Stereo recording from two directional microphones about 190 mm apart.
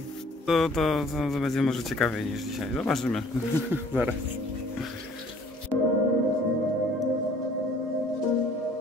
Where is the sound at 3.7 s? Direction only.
10° right (ahead or behind).